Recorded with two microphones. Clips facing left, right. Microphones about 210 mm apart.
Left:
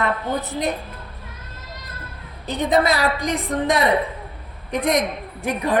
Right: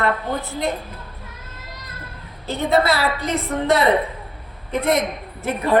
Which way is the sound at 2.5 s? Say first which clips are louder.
Even; 15° left (ahead or behind).